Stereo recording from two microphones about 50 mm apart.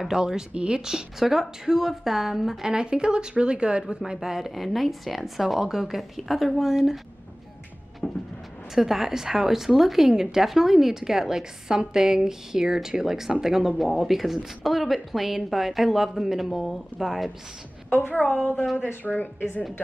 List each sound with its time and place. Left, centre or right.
0.0 s a woman's voice: centre
8.0 s a sound: centre
8.7 s a woman's voice: centre
17.8 s a woman's voice: left